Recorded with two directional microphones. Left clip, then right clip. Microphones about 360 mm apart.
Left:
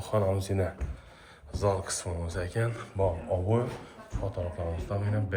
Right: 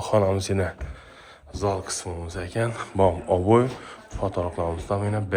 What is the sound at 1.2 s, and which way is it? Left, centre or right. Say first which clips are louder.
Speech: right 3 dB; centre.